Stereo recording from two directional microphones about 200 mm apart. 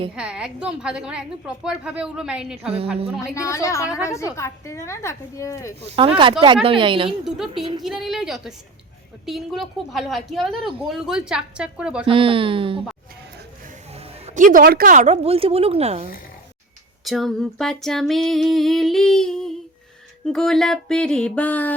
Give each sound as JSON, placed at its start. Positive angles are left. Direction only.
{"t": 0.2, "sound": "a woman's voice", "side_deg": -5}
{"t": 3.3, "sound": "a woman's voice", "side_deg": 15}
{"t": 6.0, "sound": "speech", "side_deg": -25}
{"t": 7.3, "sound": "a woman's voice", "side_deg": 0}
{"t": 12.0, "sound": "speech", "side_deg": -25}
{"t": 13.9, "sound": "speech", "side_deg": -35}
{"t": 17.0, "sound": "a woman's voice", "side_deg": 0}